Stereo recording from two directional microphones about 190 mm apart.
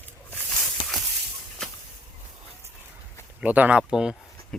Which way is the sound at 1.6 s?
5° left (ahead or behind).